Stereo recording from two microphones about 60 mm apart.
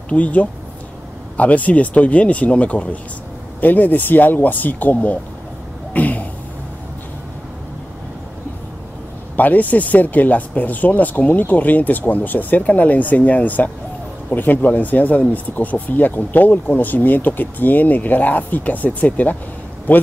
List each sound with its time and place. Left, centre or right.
0.1 s speech: left
5.9 s a sound: left
9.4 s speech: left